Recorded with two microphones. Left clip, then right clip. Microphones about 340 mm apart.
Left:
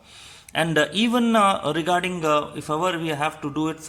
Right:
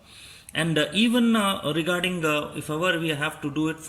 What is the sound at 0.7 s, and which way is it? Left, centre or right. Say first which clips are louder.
Speech: left 1 dB; centre.